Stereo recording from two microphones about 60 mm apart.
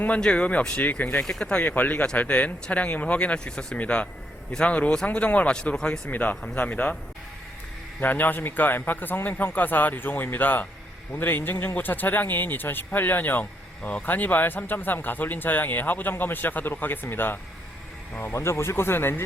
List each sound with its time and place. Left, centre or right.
0.2 s speech: centre
1.2 s speech: centre
1.6 s speech: left
6.1 s speech: left
8.0 s speech: left
18.3 s speech: left